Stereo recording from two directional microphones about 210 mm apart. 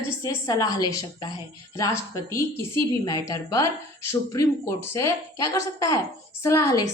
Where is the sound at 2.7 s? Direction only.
15° left (ahead or behind).